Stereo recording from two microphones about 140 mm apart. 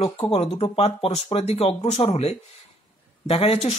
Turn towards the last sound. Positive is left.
turn(degrees=45)  # may be behind; listen again after turning